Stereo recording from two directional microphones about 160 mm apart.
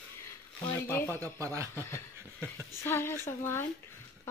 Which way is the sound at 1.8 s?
15° left (ahead or behind).